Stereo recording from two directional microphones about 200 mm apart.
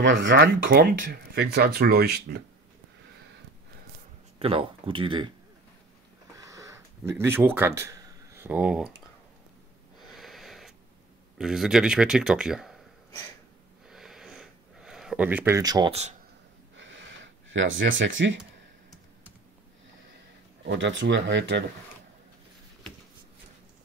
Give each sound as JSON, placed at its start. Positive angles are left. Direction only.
{"t": 0.0, "sound": "speech", "side_deg": -65}
{"t": 4.4, "sound": "speech", "side_deg": -30}
{"t": 6.3, "sound": "a sound", "side_deg": -15}
{"t": 10.1, "sound": "a sound", "side_deg": 0}
{"t": 11.3, "sound": "speech", "side_deg": 0}
{"t": 13.8, "sound": "sniff", "side_deg": 0}
{"t": 15.9, "sound": "speech", "side_deg": -35}
{"t": 16.7, "sound": "a sound", "side_deg": -65}
{"t": 20.6, "sound": "speech", "side_deg": -65}